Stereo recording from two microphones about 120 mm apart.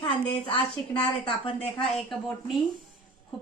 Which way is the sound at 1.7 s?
Centre (ahead or behind).